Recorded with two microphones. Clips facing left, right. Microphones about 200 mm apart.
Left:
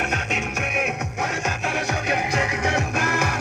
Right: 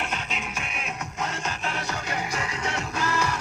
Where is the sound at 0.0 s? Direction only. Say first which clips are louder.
Left 6 dB; 70° left (ahead or behind).